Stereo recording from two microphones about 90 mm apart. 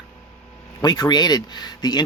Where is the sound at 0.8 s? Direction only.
50° left (ahead or behind).